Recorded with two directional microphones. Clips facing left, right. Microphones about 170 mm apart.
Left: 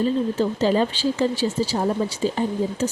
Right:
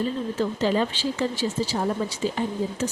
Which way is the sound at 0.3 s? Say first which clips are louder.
Even; 35° left (ahead or behind).